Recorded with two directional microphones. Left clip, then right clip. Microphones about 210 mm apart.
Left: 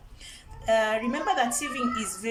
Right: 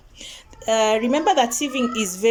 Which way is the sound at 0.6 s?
40° right (ahead or behind).